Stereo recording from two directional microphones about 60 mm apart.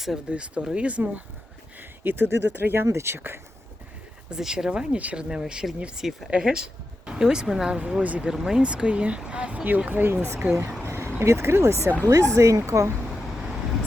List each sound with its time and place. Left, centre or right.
0.3 s speech: centre
1.8 s speech: right
2.8 s speech: right
4.3 s a woman's voice: centre
7.8 s speech: right
8.3 s speech: centre
8.6 s speech: centre
9.6 s speech: right
10.8 s vehicle: right
11.2 s speech: right
12.0 s speech: right